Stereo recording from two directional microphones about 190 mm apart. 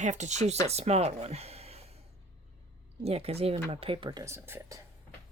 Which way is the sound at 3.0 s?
30° right (ahead or behind).